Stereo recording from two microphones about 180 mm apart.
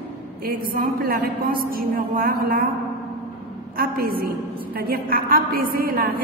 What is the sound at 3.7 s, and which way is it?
A woman's voice, 55° right (ahead or behind).